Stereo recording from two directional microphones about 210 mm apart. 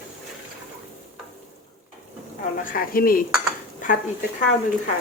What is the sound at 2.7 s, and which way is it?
Speech, 45° left (ahead or behind).